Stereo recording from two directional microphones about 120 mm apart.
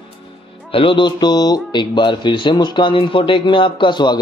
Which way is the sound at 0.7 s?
45° left (ahead or behind).